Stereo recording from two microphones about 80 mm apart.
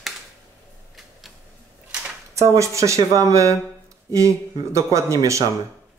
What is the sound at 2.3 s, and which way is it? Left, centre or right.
Speech, right.